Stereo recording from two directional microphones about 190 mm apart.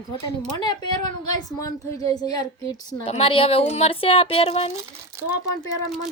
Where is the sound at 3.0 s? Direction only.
30° left (ahead or behind).